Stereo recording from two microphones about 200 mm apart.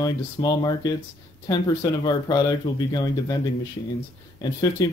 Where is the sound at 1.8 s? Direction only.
20° left (ahead or behind).